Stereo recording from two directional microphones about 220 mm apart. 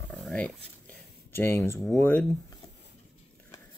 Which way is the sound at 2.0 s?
10° left (ahead or behind).